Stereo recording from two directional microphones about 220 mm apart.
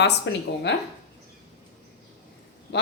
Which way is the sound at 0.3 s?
55° left (ahead or behind).